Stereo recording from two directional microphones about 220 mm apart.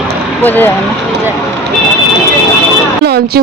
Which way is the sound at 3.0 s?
45° right (ahead or behind).